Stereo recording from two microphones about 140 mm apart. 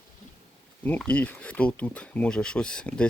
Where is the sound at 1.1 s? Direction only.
10° left (ahead or behind).